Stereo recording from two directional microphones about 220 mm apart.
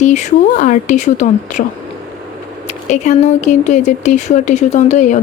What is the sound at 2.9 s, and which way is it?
A woman's voice, 30° left (ahead or behind).